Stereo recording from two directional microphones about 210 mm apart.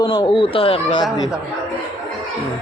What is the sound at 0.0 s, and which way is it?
Speech, 20° left (ahead or behind).